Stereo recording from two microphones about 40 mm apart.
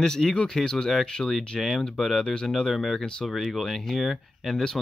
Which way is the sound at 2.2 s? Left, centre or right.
Centre.